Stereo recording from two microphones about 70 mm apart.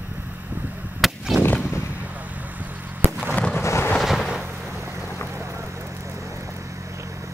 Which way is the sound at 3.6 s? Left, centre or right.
Left.